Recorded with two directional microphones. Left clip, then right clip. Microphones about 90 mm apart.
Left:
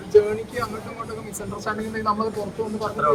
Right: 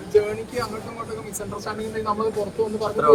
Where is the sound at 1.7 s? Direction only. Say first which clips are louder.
Left 2 dB; 5° left (ahead or behind).